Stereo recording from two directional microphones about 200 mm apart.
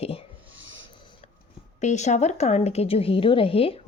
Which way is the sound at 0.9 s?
25° left (ahead or behind).